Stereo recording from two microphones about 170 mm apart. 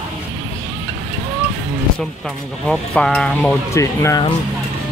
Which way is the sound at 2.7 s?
5° left (ahead or behind).